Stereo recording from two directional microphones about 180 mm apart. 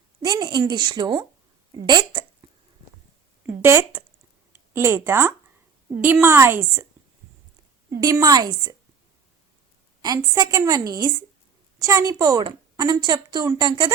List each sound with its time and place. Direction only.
0.2 s a woman's voice: 25° right (ahead or behind)
3.4 s a woman's voice: 15° right (ahead or behind)
8.0 s a woman's voice: 20° right (ahead or behind)
10.0 s a woman's voice: 20° right (ahead or behind)